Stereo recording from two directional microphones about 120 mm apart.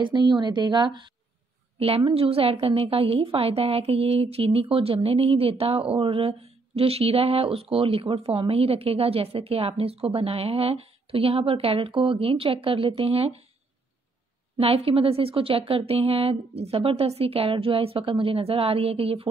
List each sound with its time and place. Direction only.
0.0 s a woman's voice: 35° right (ahead or behind)
1.8 s a woman's voice: 55° right (ahead or behind)
14.6 s a woman's voice: 50° right (ahead or behind)